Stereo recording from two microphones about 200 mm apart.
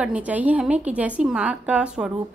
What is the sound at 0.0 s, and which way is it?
A woman's voice, 5° right (ahead or behind).